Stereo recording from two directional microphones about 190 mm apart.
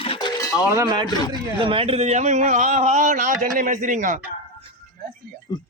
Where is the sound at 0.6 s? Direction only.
20° right (ahead or behind); by 4.2 s 40° right (ahead or behind).